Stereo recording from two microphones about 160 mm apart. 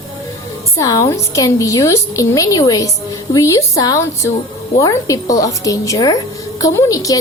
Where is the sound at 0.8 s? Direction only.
20° left (ahead or behind).